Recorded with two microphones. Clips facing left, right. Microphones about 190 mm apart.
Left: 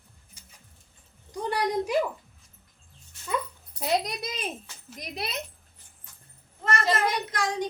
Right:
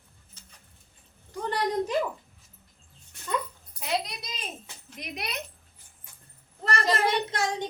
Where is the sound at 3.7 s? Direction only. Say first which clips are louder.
Left 4 dB; 40° left (ahead or behind).